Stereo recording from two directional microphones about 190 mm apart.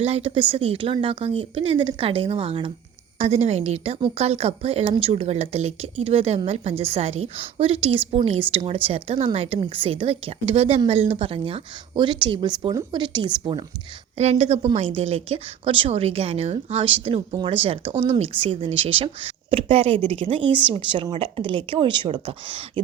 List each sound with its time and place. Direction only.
0.0 s a woman's voice: 30° right (ahead or behind)
14.2 s a woman's voice: 35° right (ahead or behind)